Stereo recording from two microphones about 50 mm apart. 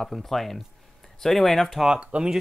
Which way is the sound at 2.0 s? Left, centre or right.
Right.